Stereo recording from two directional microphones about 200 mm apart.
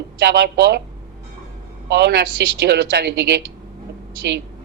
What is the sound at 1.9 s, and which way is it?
A woman's voice, 55° right (ahead or behind).